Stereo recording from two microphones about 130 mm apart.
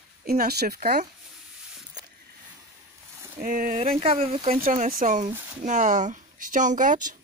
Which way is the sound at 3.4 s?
90° right.